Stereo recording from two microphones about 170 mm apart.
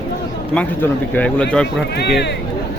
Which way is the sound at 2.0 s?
85° left.